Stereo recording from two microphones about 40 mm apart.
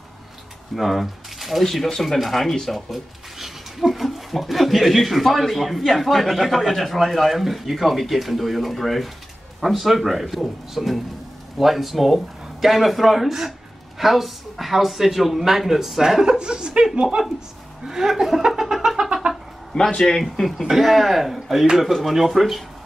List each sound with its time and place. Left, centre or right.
0.7 s speech: centre; by 17.2 s right
17.8 s chuckle: centre
19.0 s cat: centre
19.7 s speech: centre
20.2 s speech: centre